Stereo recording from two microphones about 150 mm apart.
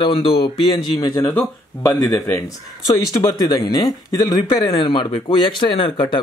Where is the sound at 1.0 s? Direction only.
25° left (ahead or behind).